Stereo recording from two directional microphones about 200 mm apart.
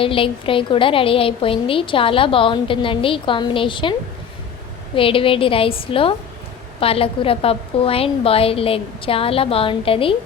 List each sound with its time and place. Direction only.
0.0 s a woman's voice: 25° left (ahead or behind)
4.9 s a woman's voice: 25° left (ahead or behind)